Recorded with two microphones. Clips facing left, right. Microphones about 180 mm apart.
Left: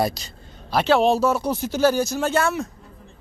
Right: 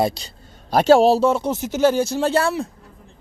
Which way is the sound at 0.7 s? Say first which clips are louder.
Right 5 dB; 45° right (ahead or behind).